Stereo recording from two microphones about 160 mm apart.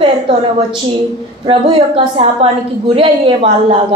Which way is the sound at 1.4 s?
30° right (ahead or behind).